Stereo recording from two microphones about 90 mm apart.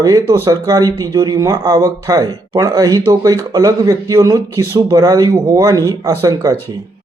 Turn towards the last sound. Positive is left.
turn(degrees=-35)  # may be behind; listen again after turning